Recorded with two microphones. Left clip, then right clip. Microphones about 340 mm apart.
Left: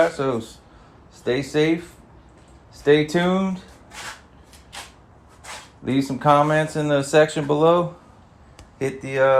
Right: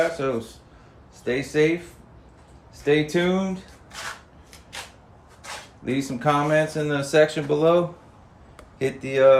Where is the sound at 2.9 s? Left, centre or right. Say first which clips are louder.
Left 4 dB; centre.